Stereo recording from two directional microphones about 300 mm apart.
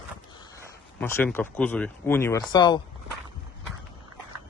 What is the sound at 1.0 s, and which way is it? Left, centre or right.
Speech, centre.